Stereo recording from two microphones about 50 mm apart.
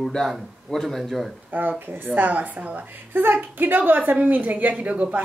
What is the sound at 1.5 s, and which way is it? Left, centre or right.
A woman's voice, right.